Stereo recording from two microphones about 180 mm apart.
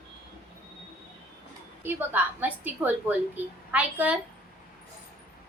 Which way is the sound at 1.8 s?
10° right (ahead or behind).